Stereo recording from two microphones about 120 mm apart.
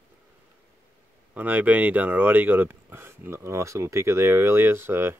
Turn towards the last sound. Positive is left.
turn(degrees=-20)  # may be behind; listen again after turning